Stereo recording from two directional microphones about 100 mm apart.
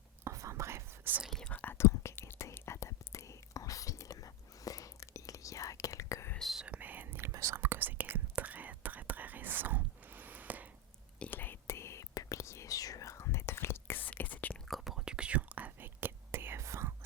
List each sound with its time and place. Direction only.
0.3 s whispering: 30° right (ahead or behind)
1.2 s whispering: 5° left (ahead or behind)
1.5 s whispering: 25° left (ahead or behind)
6.3 s whispering: centre (ahead or behind)
6.7 s whispering: 15° right (ahead or behind)
11.2 s whispering: 20° left (ahead or behind)
14.7 s whispering: 5° right (ahead or behind); by 16.9 s 30° right (ahead or behind)